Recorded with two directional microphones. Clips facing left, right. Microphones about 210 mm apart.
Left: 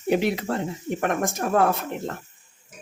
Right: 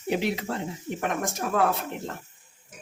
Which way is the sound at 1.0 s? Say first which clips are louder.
Left 4 dB; 50° left (ahead or behind).